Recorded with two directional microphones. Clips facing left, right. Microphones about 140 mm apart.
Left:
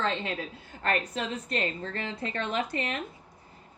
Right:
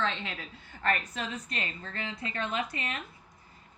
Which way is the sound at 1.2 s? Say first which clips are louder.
Left 6 dB; 30° left (ahead or behind).